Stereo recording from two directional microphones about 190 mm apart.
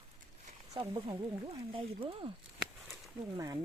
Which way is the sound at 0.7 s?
25° right (ahead or behind).